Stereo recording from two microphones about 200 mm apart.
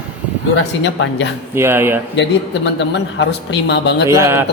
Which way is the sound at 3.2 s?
60° left (ahead or behind).